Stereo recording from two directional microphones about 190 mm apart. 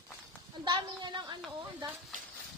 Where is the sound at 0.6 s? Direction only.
25° right (ahead or behind).